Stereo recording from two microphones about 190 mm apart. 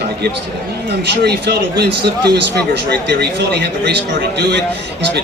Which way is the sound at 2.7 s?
60° right (ahead or behind).